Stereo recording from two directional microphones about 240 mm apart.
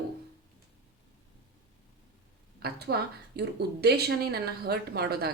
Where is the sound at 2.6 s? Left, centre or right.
Right.